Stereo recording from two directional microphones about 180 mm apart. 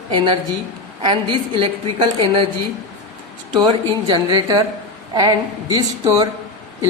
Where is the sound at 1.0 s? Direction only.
25° right (ahead or behind).